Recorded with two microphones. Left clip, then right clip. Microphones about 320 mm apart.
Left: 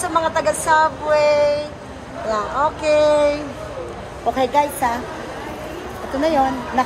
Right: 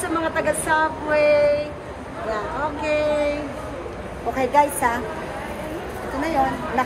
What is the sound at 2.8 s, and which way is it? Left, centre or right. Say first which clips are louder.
A woman's voice: left 6 dB; centre.